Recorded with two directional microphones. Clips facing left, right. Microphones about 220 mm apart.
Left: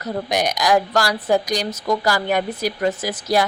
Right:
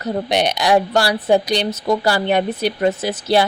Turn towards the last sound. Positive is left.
turn(degrees=-30)  # may be behind; listen again after turning